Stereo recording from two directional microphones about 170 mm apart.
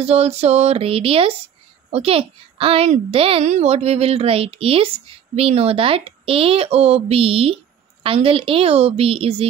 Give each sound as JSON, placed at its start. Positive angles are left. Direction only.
{"t": 0.0, "sound": "speech", "side_deg": -40}